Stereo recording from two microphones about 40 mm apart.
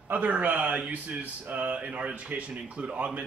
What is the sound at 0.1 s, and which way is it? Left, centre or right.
Speech, right.